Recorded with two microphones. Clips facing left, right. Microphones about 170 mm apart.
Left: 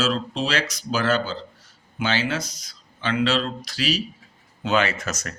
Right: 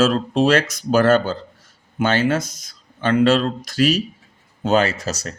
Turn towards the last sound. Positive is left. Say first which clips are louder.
# right 4 dB
turn(degrees=-30)  # may be behind; listen again after turning